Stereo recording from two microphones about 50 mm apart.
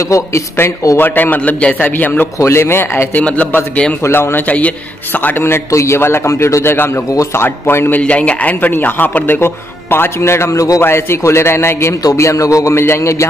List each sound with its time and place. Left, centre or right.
0.0 s speech: left
0.6 s speech: left
0.9 s a man's voice: left
2.3 s a man's voice: left
3.2 s a man's voice: left
4.0 s speech: left
4.5 s a man's voice: left
5.7 s speech: left
5.9 s a man's voice: left
8.0 s speech: left
8.5 s a man's voice: left
9.4 s a man's voice: left
10.8 s a man's voice: left
12.8 s a man's voice: left